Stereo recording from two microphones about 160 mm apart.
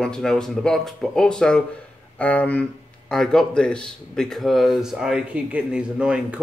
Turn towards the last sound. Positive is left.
turn(degrees=-5)  # may be behind; listen again after turning